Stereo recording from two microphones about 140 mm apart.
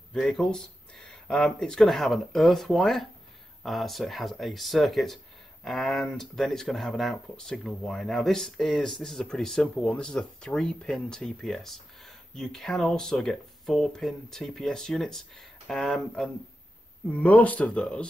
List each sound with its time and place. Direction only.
0.1 s speech: centre (ahead or behind)